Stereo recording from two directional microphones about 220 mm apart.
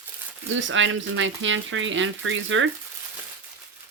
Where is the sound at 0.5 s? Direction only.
60° right (ahead or behind).